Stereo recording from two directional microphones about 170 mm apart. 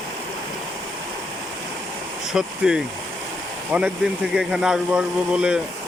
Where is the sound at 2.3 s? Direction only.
5° right (ahead or behind).